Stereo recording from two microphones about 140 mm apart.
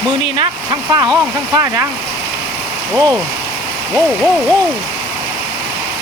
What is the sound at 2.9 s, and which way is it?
Speech, 20° right (ahead or behind).